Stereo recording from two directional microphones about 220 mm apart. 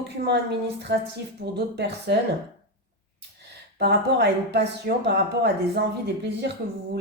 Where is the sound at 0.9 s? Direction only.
50° right (ahead or behind).